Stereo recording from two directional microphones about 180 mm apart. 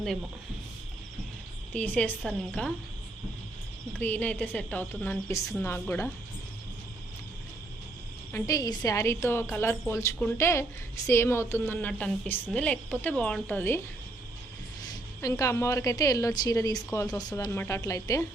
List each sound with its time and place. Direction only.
1.7 s a woman's voice: 10° left (ahead or behind)
3.9 s a woman's voice: 10° left (ahead or behind)
8.3 s a woman's voice: 15° left (ahead or behind)
14.8 s a woman's voice: 20° left (ahead or behind)